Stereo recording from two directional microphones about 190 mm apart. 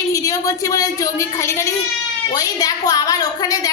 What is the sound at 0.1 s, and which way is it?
A woman's voice, 15° left (ahead or behind).